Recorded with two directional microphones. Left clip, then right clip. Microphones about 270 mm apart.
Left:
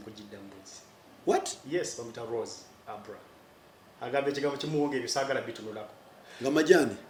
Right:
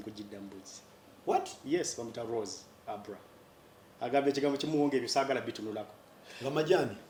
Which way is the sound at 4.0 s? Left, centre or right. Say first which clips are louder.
Even; right.